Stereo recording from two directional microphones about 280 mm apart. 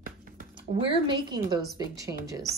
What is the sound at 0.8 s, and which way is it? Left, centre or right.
A woman's voice, centre.